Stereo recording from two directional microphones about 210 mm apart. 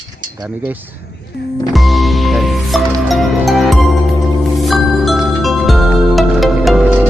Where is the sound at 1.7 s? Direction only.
Centre (ahead or behind).